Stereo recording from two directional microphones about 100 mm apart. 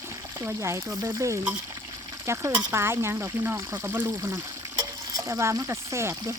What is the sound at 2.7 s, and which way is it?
Speech, 25° right (ahead or behind).